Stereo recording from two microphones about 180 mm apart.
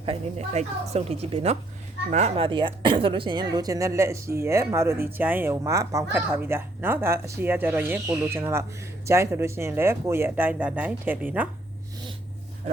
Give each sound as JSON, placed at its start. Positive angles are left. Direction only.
{"t": 0.0, "sound": "a woman's voice", "side_deg": -35}